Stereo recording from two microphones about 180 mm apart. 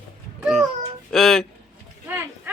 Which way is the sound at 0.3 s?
5° right (ahead or behind).